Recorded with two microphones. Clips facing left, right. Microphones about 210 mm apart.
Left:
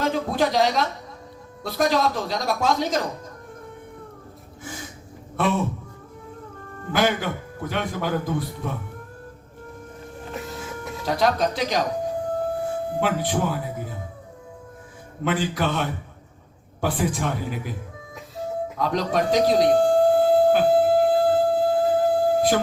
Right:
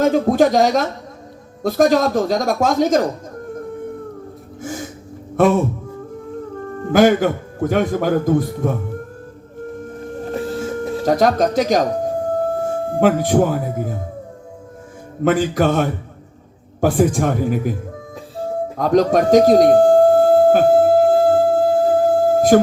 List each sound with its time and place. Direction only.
0.0 s a man's voice: 45° right (ahead or behind)
4.6 s a man's voice: 45° right (ahead or behind)
6.7 s a man's voice: 45° right (ahead or behind)
10.2 s a sound: 30° right (ahead or behind)
11.0 s a man's voice: 45° right (ahead or behind)
15.2 s a man's voice: 45° right (ahead or behind)
18.8 s music: 45° right (ahead or behind)